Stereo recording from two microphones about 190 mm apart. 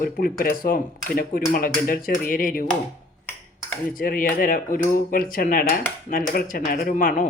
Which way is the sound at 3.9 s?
50° left (ahead or behind).